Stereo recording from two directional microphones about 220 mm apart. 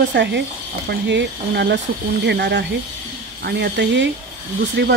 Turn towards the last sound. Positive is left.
turn(degrees=-50)  # may be behind; listen again after turning